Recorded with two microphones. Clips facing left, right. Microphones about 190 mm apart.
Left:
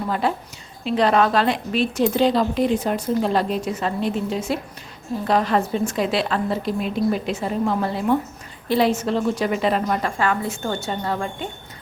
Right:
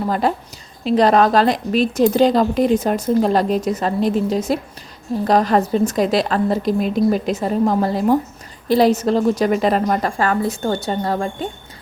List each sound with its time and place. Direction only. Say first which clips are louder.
0.1 s a woman's voice: right 4 dB; 40° right (ahead or behind)